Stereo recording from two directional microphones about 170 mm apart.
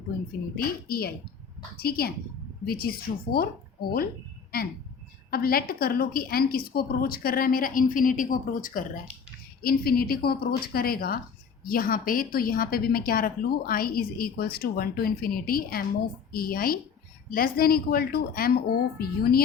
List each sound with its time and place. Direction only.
0.5 s a woman's voice: 60° left (ahead or behind)
5.3 s a woman's voice: 60° left (ahead or behind)